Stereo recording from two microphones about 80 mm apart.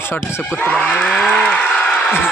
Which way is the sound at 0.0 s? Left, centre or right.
Left.